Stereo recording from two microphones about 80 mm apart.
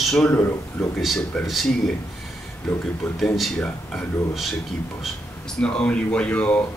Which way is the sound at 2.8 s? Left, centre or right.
Centre.